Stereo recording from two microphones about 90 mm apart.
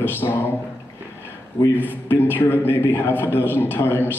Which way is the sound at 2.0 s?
25° left (ahead or behind).